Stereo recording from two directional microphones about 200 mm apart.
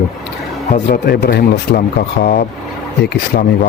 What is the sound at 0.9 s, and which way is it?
Speech, 55° left (ahead or behind).